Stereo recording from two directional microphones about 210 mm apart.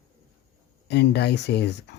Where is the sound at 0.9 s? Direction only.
55° left (ahead or behind).